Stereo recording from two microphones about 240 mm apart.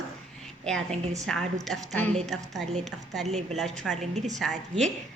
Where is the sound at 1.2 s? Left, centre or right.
Centre.